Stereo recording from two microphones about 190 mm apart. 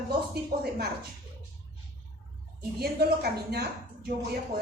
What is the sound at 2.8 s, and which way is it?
Speech, 55° right (ahead or behind).